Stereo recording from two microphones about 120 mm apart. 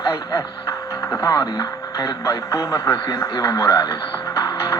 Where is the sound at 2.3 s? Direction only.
25° left (ahead or behind).